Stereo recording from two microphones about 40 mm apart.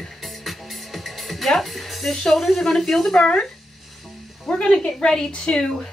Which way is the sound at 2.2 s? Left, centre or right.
Centre.